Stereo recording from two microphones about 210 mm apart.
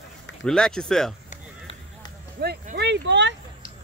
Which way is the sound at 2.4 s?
50° right (ahead or behind).